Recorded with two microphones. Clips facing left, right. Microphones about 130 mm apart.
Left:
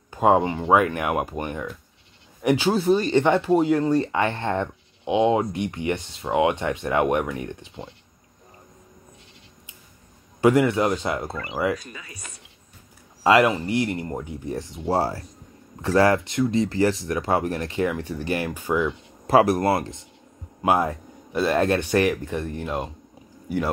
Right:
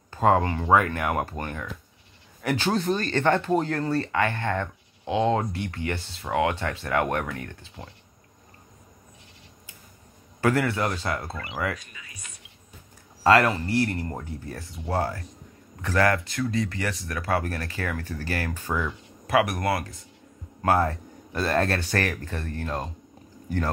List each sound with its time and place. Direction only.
0.1 s speech: 15° left (ahead or behind)
10.4 s speech: 20° left (ahead or behind)
11.3 s speech: 40° left (ahead or behind)
13.2 s speech: 15° left (ahead or behind)
19.2 s speech: 30° left (ahead or behind)
20.6 s speech: 15° left (ahead or behind)